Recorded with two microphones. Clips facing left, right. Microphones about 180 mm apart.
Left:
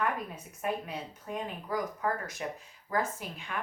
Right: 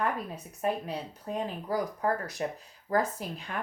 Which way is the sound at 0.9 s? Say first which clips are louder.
Right 3 dB; 35° right (ahead or behind).